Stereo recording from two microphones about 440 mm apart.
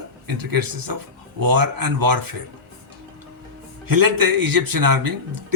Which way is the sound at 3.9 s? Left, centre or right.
Right.